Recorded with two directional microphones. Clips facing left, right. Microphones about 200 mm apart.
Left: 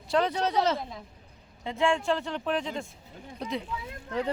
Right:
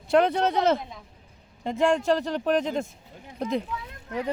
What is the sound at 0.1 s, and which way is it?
Speech, 55° right (ahead or behind).